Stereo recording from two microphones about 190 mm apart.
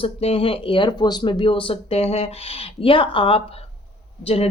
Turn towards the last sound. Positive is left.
turn(degrees=30)  # may be behind; listen again after turning